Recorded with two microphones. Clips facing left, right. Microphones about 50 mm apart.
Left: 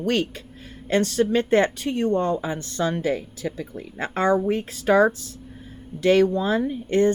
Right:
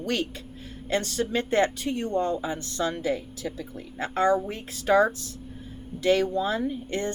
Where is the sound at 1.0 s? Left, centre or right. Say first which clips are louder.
Left 9 dB; left.